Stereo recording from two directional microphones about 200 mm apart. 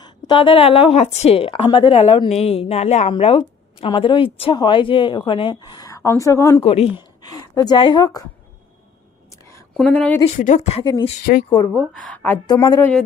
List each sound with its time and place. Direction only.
0.0 s a woman's voice: 25° left (ahead or behind)
6.6 s a woman's voice: 30° left (ahead or behind)
9.4 s whispering: 15° left (ahead or behind)
9.7 s speech: 5° left (ahead or behind)
10.2 s a woman's voice: 35° left (ahead or behind); by 11.7 s 20° left (ahead or behind)
12.1 s a woman's voice: 10° left (ahead or behind)